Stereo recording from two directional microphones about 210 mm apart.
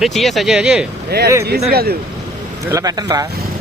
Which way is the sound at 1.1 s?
50° right (ahead or behind).